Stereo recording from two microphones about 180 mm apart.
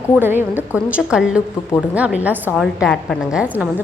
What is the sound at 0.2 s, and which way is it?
A woman's voice, 10° right (ahead or behind).